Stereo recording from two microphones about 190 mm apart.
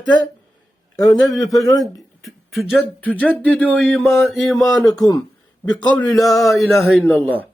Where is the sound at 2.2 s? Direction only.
Centre (ahead or behind).